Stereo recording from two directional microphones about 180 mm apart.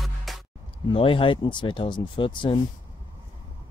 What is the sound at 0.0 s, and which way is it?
Music, centre (ahead or behind).